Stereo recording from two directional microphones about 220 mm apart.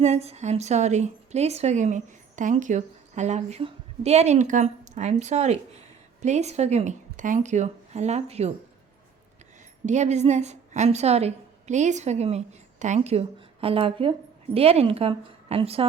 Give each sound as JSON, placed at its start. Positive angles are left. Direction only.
{"t": 0.0, "sound": "a woman's voice", "side_deg": -30}
{"t": 9.8, "sound": "a woman's voice", "side_deg": -30}